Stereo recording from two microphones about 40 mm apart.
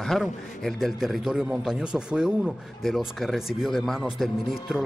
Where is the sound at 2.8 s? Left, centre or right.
Centre.